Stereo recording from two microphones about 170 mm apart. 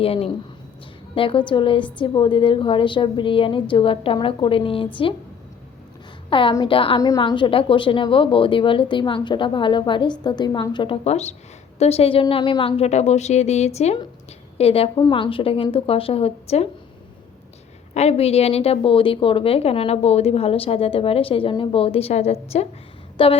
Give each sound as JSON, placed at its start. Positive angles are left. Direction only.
{"t": 0.0, "sound": "a woman's voice", "side_deg": 35}
{"t": 6.3, "sound": "a woman's voice", "side_deg": 25}
{"t": 17.9, "sound": "a woman's voice", "side_deg": 40}